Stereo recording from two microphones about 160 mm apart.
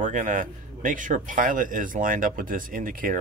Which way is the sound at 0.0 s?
55° right (ahead or behind).